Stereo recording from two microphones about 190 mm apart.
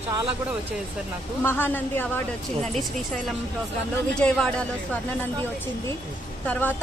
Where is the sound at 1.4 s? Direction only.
10° left (ahead or behind).